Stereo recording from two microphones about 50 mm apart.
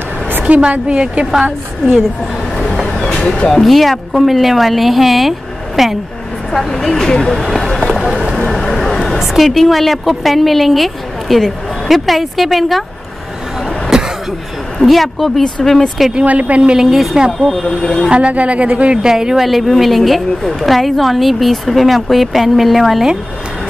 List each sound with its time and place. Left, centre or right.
0.3 s a sound: right
0.6 s speech: centre
2.6 s vehicle: centre
3.2 s a woman's voice: centre
7.4 s run: centre
8.5 s a woman's voice: centre
13.8 s a sound: centre
14.8 s a woman's voice: centre
16.2 s speech: right
16.7 s a woman's voice: centre
17.6 s speech: centre
18.1 s speech: right
19.0 s a woman's voice: centre